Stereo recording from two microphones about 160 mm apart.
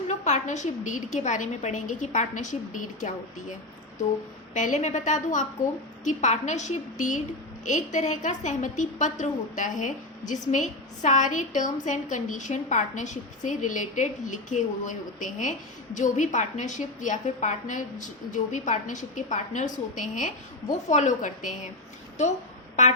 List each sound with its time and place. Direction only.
0.1 s a woman's voice: 50° left (ahead or behind)
4.5 s a woman's voice: 50° left (ahead or behind)